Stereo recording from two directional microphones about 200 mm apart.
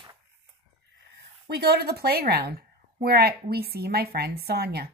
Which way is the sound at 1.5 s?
55° right (ahead or behind).